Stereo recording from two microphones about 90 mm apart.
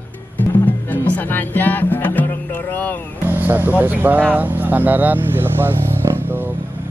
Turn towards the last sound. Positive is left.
turn(degrees=-25)  # may be behind; listen again after turning